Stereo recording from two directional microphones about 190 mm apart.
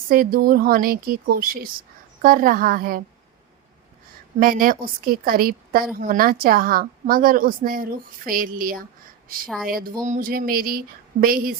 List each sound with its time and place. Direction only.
0.1 s a woman's voice: 50° right (ahead or behind)
4.4 s a woman's voice: 50° right (ahead or behind)